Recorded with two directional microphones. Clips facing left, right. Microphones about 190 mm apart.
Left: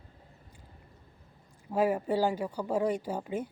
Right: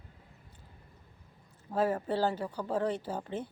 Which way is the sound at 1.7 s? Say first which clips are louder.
Left 3 dB; 10° left (ahead or behind).